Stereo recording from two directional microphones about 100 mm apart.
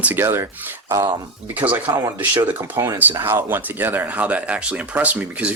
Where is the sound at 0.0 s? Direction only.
20° right (ahead or behind).